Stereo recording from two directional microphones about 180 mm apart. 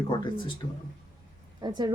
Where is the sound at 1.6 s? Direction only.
25° right (ahead or behind).